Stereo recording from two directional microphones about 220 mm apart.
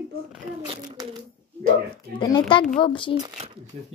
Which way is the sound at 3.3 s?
25° right (ahead or behind).